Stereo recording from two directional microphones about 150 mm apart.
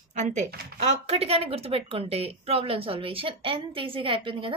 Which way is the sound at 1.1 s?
45° right (ahead or behind).